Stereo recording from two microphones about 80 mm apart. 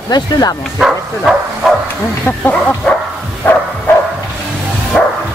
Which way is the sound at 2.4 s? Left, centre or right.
Centre.